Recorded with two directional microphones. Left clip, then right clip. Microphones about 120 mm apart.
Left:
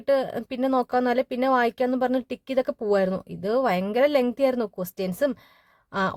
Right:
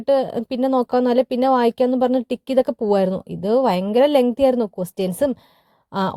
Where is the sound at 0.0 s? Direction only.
25° right (ahead or behind).